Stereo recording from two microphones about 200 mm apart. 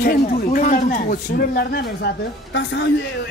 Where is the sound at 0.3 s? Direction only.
40° left (ahead or behind); by 3.1 s 65° left (ahead or behind).